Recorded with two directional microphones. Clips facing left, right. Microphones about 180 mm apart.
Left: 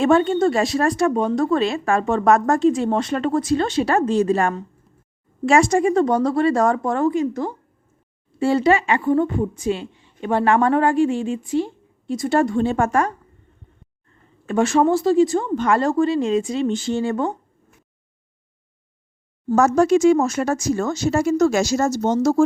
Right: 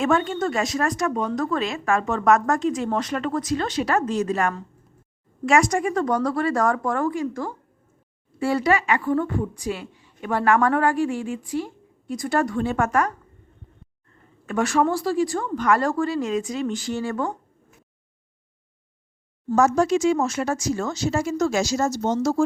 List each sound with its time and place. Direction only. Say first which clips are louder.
0.0 s a woman's voice: left 6 dB; 30° left (ahead or behind)
14.4 s a woman's voice: left 4 dB; 25° left (ahead or behind)
19.5 s speech: left 3 dB; 50° left (ahead or behind)